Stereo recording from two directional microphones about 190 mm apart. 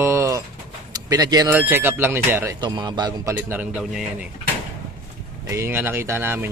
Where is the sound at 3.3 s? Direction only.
10° right (ahead or behind).